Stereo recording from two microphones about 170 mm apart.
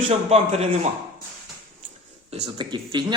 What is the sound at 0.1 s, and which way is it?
Speech, 40° right (ahead or behind).